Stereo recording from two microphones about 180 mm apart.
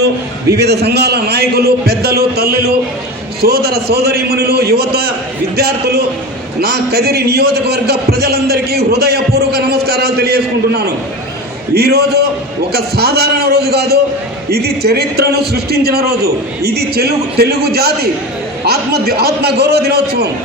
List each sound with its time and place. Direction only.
0.5 s a man's voice: 65° right (ahead or behind)